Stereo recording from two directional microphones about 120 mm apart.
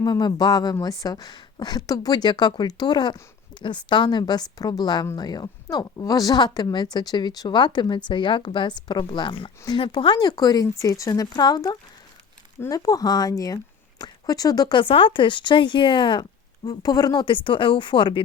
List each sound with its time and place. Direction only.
0.0 s speech: 35° left (ahead or behind)